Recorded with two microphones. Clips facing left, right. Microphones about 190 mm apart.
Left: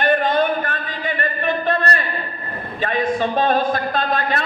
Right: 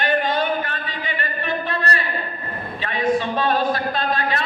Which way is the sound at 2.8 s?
50° left (ahead or behind).